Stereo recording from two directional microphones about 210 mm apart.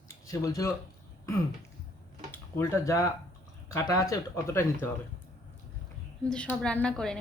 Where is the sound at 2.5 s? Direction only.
15° left (ahead or behind).